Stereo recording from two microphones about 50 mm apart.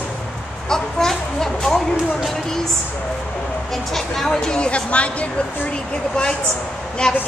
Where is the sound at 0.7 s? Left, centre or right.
Centre.